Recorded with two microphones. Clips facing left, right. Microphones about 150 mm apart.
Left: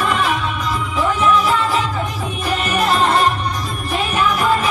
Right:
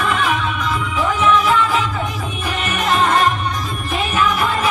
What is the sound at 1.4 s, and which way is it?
Music, 35° left (ahead or behind).